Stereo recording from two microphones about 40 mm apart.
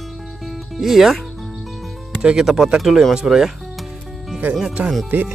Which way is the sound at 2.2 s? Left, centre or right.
Centre.